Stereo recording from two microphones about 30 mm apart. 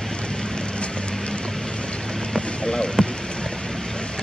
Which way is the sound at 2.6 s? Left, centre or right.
Centre.